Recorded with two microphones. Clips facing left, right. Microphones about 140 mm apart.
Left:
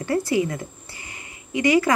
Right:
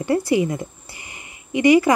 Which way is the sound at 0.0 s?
20° right (ahead or behind).